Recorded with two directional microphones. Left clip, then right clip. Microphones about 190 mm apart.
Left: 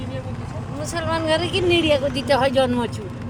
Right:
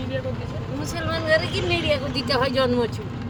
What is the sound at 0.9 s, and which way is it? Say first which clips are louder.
Speech: left 1 dB; 45° left (ahead or behind).